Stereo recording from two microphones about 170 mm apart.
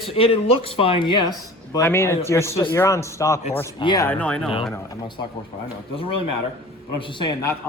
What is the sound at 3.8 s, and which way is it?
Speech, 25° left (ahead or behind).